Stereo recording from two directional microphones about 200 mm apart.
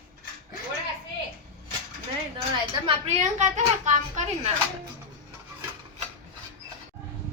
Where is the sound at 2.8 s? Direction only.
35° right (ahead or behind).